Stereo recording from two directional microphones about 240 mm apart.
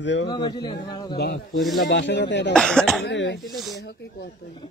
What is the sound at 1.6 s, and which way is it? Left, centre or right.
Speech, centre.